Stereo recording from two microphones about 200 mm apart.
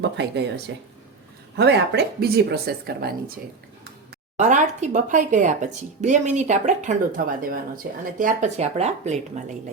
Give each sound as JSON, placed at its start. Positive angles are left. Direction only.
{"t": 0.2, "sound": "speech", "side_deg": -60}
{"t": 4.4, "sound": "speech", "side_deg": -35}